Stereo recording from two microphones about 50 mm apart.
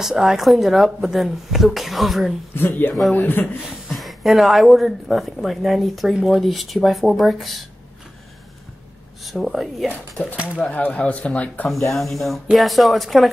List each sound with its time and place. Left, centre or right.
0.0 s speech: centre
2.5 s speech: left
3.9 s speech: centre
6.1 s speech: centre
6.4 s speech: centre
9.2 s speech: centre
10.3 s speech: right
10.7 s speech: left
11.9 s speech: centre